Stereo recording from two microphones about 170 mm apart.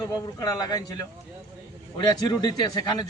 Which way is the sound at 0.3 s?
20° left (ahead or behind).